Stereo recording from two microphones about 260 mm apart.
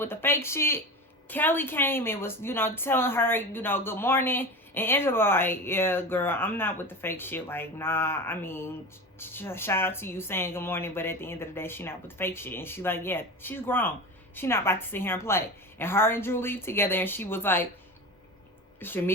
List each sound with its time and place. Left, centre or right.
0.0 s a woman's voice: centre
18.8 s a woman's voice: centre